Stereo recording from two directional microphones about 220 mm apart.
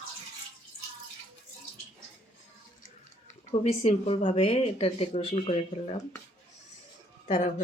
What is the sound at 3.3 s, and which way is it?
Speech, 25° left (ahead or behind).